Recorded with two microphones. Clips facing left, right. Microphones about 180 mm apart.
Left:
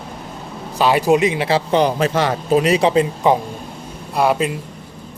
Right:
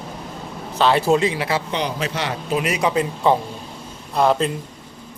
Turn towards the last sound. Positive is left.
turn(degrees=10)  # may be behind; listen again after turning